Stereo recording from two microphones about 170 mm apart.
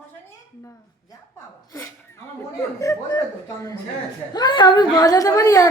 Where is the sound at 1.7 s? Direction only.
20° left (ahead or behind).